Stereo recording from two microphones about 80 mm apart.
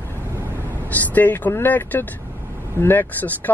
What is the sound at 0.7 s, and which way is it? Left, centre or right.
Speech, left.